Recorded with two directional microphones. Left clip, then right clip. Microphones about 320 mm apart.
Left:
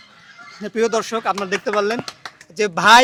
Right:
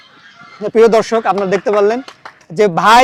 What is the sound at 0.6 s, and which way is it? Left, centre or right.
A man's voice, centre.